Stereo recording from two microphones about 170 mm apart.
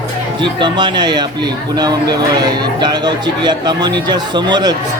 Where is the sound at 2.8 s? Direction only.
25° right (ahead or behind).